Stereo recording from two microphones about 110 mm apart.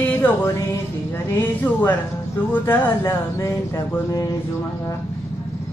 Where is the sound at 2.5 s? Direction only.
20° left (ahead or behind).